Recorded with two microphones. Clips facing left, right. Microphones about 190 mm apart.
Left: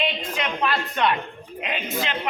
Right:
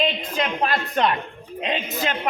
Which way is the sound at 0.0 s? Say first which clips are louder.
Right 3 dB; 40° right (ahead or behind).